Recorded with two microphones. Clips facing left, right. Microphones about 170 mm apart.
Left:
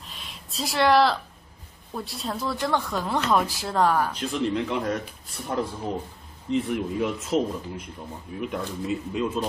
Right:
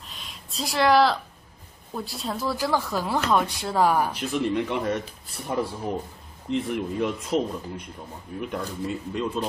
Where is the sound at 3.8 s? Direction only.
10° right (ahead or behind).